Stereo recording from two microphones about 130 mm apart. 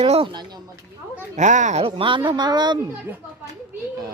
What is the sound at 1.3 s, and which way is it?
Speech, 70° right (ahead or behind).